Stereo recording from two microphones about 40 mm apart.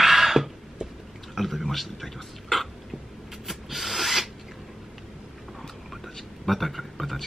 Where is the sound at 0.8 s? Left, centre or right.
Right.